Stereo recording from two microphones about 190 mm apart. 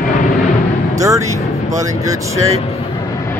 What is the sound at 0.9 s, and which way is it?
Speech, 15° right (ahead or behind).